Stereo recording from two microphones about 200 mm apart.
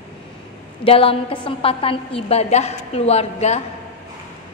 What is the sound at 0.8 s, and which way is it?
A woman's voice, 30° left (ahead or behind).